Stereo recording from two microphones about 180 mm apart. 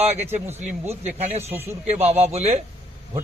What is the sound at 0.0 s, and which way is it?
A man's voice, 35° right (ahead or behind).